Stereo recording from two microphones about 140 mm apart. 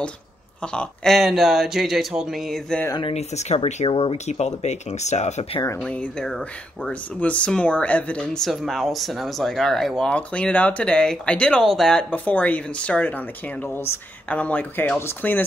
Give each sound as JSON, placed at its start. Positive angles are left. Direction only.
{"t": 0.6, "sound": "speech", "side_deg": 5}
{"t": 3.0, "sound": "speech", "side_deg": 45}
{"t": 5.9, "sound": "speech", "side_deg": 10}